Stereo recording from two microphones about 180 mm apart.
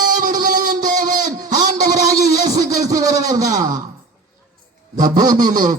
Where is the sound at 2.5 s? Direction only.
20° right (ahead or behind).